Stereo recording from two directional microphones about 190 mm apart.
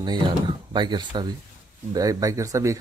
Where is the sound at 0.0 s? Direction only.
25° right (ahead or behind).